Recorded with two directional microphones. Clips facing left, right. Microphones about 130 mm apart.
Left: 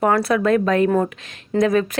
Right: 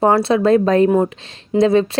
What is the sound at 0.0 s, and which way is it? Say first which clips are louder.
Speech: right 4 dB; 25° right (ahead or behind).